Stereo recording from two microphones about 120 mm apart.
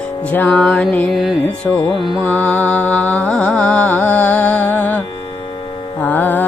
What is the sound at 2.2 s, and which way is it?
Music, 15° left (ahead or behind).